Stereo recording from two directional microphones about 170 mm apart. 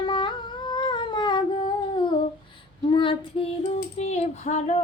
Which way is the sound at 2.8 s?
30° left (ahead or behind).